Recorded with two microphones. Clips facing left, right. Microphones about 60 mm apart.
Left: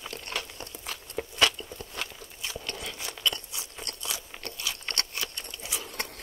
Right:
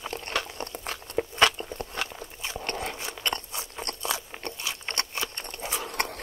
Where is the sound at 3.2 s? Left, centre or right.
Right.